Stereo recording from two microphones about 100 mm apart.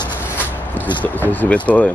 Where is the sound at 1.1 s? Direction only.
15° left (ahead or behind).